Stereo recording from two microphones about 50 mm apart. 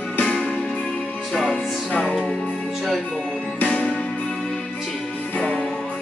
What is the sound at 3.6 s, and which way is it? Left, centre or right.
Music, left.